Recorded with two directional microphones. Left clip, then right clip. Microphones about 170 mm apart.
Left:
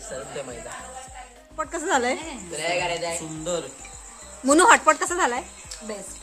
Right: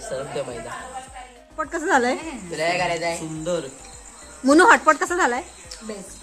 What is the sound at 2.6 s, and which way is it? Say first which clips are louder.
Speech: right 3 dB; 40° right (ahead or behind).